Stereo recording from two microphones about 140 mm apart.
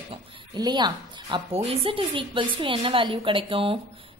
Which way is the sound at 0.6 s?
30° right (ahead or behind).